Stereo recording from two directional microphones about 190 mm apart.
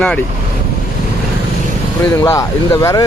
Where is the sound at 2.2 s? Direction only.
15° left (ahead or behind).